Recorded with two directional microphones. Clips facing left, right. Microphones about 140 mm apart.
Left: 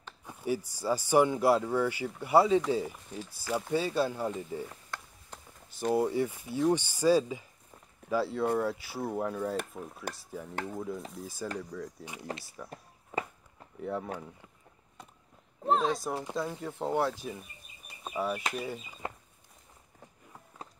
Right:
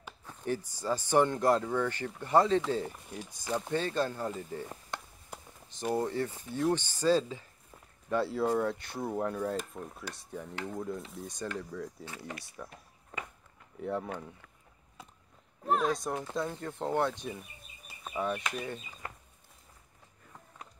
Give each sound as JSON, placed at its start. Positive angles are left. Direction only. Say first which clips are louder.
{"t": 0.2, "sound": "speech", "louder": "left 2 dB", "side_deg": 10}
{"t": 3.1, "sound": "speech", "louder": "left 1 dB", "side_deg": -15}
{"t": 3.5, "sound": "speech", "louder": "left 2 dB", "side_deg": 10}
{"t": 4.9, "sound": "a sound", "louder": "right 3 dB", "side_deg": -20}
{"t": 5.3, "sound": "a sound", "louder": "right 3 dB", "side_deg": -10}
{"t": 5.9, "sound": "speech", "louder": "left 4 dB", "side_deg": 10}
{"t": 8.1, "sound": "speech", "louder": "even", "side_deg": 0}
{"t": 12.0, "sound": "speech", "louder": "even", "side_deg": 15}
{"t": 12.6, "sound": "speech", "louder": "even", "side_deg": 0}
{"t": 13.1, "sound": "a sound", "louder": "left 8 dB", "side_deg": 10}
{"t": 13.7, "sound": "speech", "louder": "even", "side_deg": 0}
{"t": 15.0, "sound": "a sound", "louder": "even", "side_deg": 0}
{"t": 15.6, "sound": "speech", "louder": "left 1 dB", "side_deg": 25}
{"t": 16.3, "sound": "speech", "louder": "even", "side_deg": 0}